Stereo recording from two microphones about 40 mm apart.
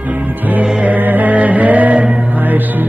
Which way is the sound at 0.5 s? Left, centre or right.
Right.